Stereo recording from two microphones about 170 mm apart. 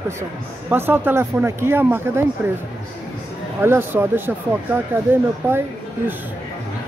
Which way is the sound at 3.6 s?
15° right (ahead or behind).